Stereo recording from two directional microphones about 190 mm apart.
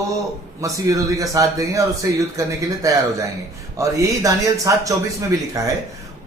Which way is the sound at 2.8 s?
15° right (ahead or behind).